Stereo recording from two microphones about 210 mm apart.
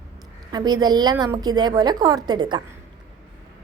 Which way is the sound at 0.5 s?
20° right (ahead or behind).